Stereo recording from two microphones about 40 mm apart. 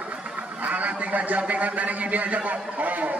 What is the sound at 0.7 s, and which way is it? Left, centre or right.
A man's voice, right.